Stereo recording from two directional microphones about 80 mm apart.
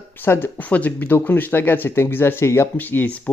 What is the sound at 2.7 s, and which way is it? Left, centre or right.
Speech, left.